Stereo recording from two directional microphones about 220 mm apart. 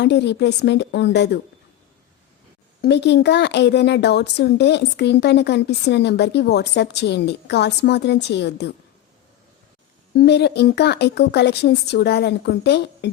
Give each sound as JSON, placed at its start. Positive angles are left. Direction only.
{"t": 0.0, "sound": "speech", "side_deg": 50}
{"t": 2.8, "sound": "speech", "side_deg": 50}
{"t": 10.2, "sound": "speech", "side_deg": 50}